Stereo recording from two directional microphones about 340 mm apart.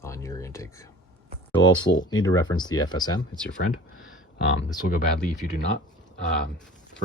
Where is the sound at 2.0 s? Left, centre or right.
Centre.